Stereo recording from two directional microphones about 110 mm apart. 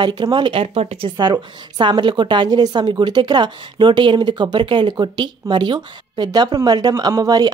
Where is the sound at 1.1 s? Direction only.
40° right (ahead or behind).